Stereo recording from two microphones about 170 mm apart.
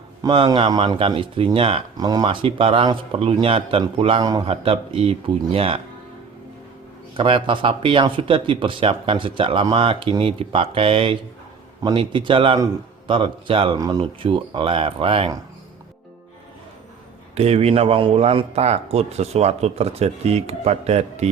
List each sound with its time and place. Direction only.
0.2 s a man's voice: 25° right (ahead or behind)
2.0 s speech: 25° right (ahead or behind)
7.2 s a man's voice: 30° right (ahead or behind)
14.0 s speech: 30° right (ahead or behind)
17.3 s speech: 40° right (ahead or behind)